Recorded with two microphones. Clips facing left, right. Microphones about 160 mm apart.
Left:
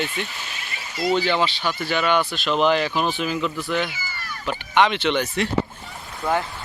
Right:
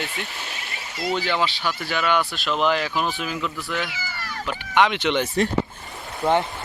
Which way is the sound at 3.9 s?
90° right.